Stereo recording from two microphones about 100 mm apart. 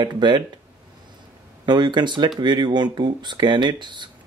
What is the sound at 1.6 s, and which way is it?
Speech, 50° right (ahead or behind).